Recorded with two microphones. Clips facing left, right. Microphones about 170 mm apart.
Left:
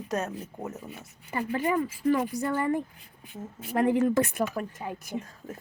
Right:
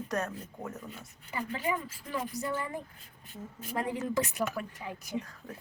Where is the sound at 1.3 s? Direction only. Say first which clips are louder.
Left 6 dB; 55° left (ahead or behind).